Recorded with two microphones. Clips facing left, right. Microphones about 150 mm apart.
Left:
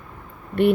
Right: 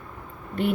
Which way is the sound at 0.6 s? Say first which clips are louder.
Left 8 dB; 65° left (ahead or behind).